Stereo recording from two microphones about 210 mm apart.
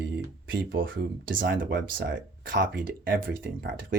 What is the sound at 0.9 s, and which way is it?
Speech, 40° right (ahead or behind).